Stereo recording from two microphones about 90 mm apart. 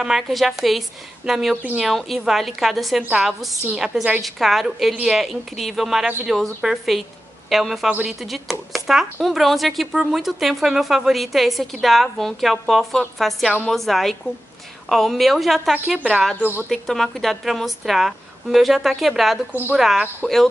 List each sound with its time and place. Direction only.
0.0 s speech: 5° right (ahead or behind)
3.0 s a woman's voice: 15° right (ahead or behind)
3.3 s speech: centre (ahead or behind)
16.3 s speech: 20° right (ahead or behind)
16.7 s speech: centre (ahead or behind)